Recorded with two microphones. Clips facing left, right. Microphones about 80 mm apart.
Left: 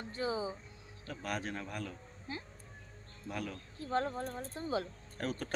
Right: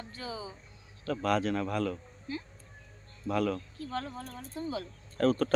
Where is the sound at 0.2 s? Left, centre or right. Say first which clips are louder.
Left 5 dB; left.